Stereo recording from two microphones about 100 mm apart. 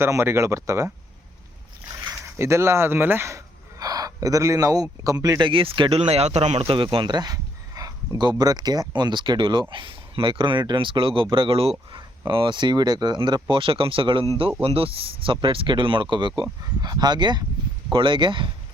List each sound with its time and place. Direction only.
0.0 s speech: 25° right (ahead or behind)
2.0 s speech: 30° right (ahead or behind)
5.4 s speech: 60° right (ahead or behind)
6.1 s speech: 90° right; by 11.9 s 70° right (ahead or behind)
12.3 s speech: 55° right (ahead or behind)